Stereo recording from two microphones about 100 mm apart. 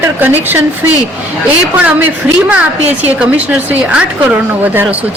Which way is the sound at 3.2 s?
15° right (ahead or behind).